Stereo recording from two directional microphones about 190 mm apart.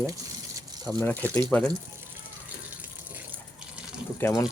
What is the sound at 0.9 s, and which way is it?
Speech, 10° left (ahead or behind).